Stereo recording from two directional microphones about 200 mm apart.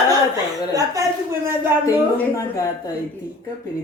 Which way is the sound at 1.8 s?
15° left (ahead or behind).